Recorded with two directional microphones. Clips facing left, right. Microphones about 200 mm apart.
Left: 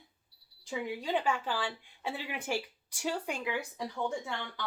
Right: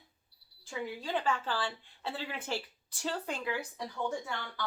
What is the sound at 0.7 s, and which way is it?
Speech, 15° left (ahead or behind).